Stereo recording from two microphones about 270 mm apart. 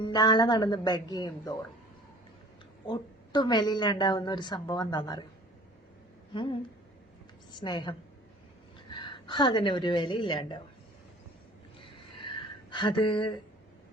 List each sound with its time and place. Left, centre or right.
0.0 s a woman's voice: centre
2.8 s a woman's voice: centre
6.3 s a woman's voice: centre
12.7 s a woman's voice: centre